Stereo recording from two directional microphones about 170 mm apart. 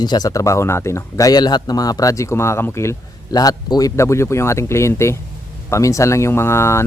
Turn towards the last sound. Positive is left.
turn(degrees=15)  # may be behind; listen again after turning